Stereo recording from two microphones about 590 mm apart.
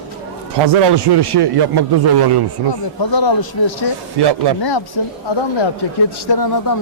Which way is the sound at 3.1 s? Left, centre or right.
Left.